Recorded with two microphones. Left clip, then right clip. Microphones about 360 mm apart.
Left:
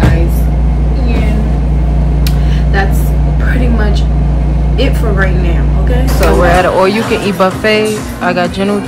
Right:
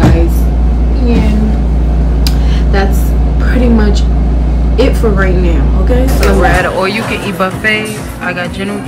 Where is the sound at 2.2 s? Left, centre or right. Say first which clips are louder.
Right 1 dB; centre.